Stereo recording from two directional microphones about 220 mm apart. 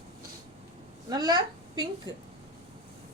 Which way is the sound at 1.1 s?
20° right (ahead or behind).